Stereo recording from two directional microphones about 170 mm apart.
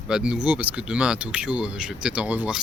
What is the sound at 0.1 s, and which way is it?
Speech, 5° right (ahead or behind).